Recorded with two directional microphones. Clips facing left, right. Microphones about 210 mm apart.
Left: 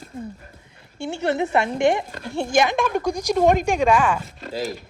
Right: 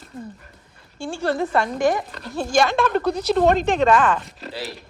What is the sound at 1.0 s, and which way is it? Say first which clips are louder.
A woman's voice: even; 20° left (ahead or behind).